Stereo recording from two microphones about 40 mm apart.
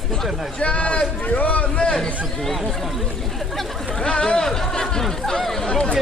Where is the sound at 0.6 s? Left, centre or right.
Left.